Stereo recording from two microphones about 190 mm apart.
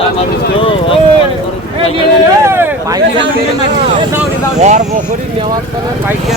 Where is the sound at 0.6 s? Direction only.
25° left (ahead or behind).